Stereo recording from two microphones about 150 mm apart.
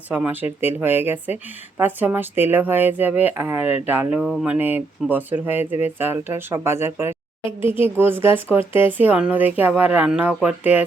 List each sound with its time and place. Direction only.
0.1 s speech: 10° right (ahead or behind)